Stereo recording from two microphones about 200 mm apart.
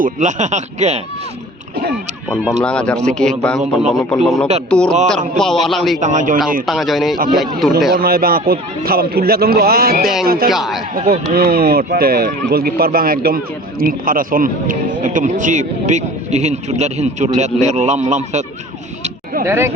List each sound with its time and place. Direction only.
0.0 s speech: 35° right (ahead or behind)
2.4 s speech: centre (ahead or behind)
6.0 s speech: 40° right (ahead or behind)
6.7 s speech: centre (ahead or behind)
7.9 s a man's voice: 50° right (ahead or behind)
10.5 s speech: centre (ahead or behind)
10.9 s speech: 30° right (ahead or behind)
11.3 s speech: 50° right (ahead or behind)
19.0 s a sound: 45° right (ahead or behind)
19.5 s speech: 15° right (ahead or behind)